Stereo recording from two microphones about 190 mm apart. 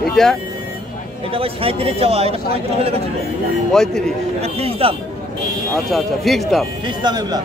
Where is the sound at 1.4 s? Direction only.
30° right (ahead or behind).